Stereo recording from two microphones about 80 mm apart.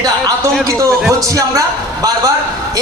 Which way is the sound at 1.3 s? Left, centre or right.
Right.